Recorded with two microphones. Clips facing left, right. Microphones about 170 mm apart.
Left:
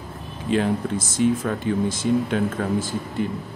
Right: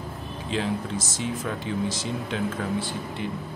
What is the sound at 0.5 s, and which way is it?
Speech, 55° left (ahead or behind).